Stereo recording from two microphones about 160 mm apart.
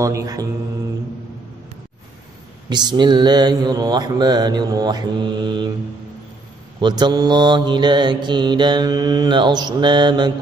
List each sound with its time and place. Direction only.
0.0 s mantra: 20° right (ahead or behind)
2.7 s mantra: 25° right (ahead or behind)
6.8 s mantra: 25° right (ahead or behind)